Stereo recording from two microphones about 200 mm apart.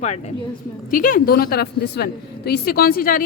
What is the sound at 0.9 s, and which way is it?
A woman's voice, 45° left (ahead or behind).